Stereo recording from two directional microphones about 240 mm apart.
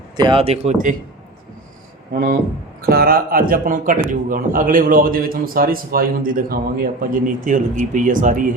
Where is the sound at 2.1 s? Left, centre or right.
Right.